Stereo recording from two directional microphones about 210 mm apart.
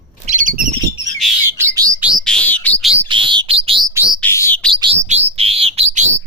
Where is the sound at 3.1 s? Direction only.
25° right (ahead or behind).